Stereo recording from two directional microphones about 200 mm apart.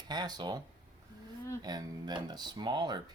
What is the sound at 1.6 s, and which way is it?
Speech, 20° right (ahead or behind).